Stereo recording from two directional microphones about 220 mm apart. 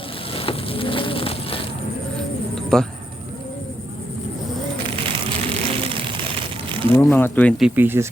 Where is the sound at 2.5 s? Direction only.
Centre (ahead or behind).